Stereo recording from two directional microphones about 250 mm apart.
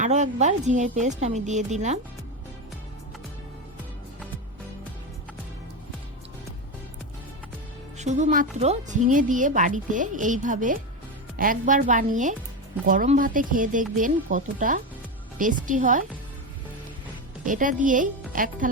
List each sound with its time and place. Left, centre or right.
0.0 s a woman's voice: right
7.9 s a woman's voice: right
17.4 s a woman's voice: right